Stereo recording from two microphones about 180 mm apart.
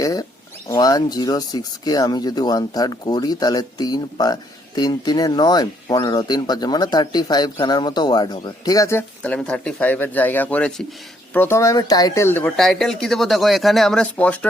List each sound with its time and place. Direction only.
0.0 s speech: 20° left (ahead or behind)